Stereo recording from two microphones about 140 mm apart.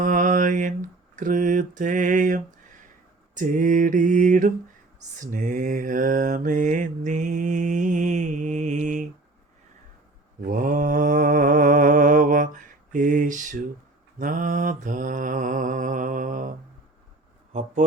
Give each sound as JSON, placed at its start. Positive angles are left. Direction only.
{"t": 0.0, "sound": "mantra", "side_deg": -70}
{"t": 10.4, "sound": "mantra", "side_deg": -70}
{"t": 17.5, "sound": "a sound", "side_deg": -60}